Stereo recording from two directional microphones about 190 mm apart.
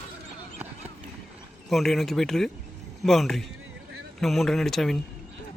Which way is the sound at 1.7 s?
Centre (ahead or behind).